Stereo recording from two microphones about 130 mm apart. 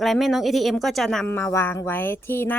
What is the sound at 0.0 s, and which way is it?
Speech, centre (ahead or behind).